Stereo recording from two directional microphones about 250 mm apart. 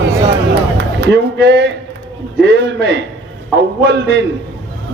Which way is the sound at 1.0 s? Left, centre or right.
Right.